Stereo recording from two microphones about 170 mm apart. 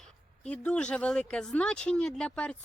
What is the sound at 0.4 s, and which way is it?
Speech, 5° left (ahead or behind).